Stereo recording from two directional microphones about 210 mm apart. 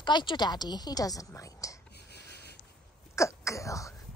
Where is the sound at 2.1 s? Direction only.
50° left (ahead or behind).